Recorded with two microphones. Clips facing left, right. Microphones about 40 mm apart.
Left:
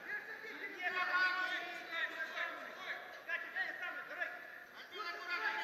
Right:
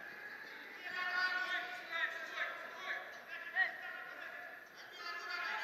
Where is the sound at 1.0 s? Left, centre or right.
Left.